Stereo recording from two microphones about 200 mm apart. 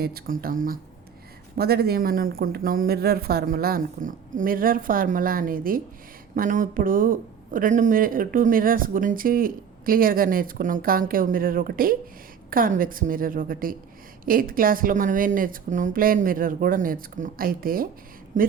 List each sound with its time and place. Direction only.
0.0 s speech: 50° right (ahead or behind)